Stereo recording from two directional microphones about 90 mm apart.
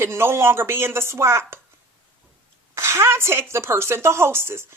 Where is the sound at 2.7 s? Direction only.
30° right (ahead or behind).